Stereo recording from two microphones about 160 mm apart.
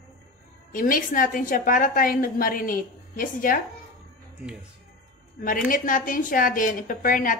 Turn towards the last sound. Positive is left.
turn(degrees=60)  # may be behind; listen again after turning